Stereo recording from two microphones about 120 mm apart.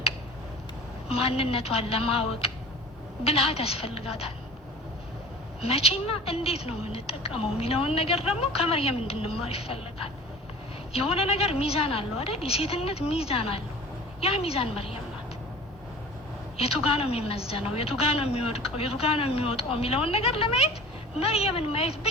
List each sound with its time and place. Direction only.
1.1 s a woman's voice: 55° left (ahead or behind)
5.6 s a woman's voice: 55° left (ahead or behind)
16.6 s a woman's voice: 55° left (ahead or behind)